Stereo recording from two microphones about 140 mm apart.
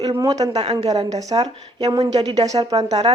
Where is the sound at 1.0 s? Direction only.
25° right (ahead or behind).